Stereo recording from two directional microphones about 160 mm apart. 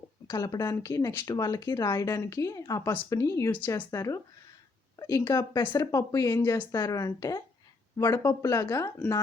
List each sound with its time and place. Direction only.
0.3 s a woman's voice: 25° left (ahead or behind)